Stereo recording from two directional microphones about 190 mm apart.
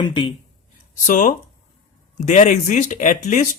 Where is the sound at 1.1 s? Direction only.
45° left (ahead or behind).